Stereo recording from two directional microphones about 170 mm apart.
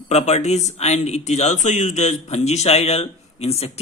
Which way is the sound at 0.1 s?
40° left (ahead or behind).